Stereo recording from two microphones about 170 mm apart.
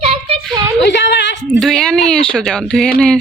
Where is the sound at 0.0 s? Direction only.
35° right (ahead or behind).